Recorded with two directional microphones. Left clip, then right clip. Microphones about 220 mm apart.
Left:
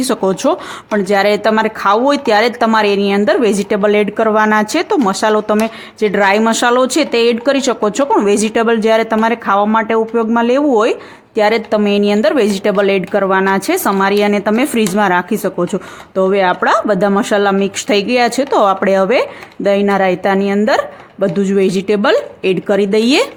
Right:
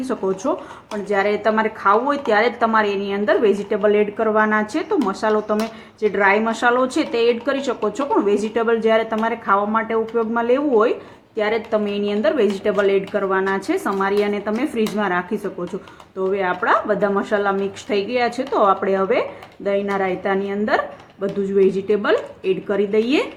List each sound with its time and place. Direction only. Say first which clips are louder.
0.0 s speech: left 8 dB; 45° left (ahead or behind)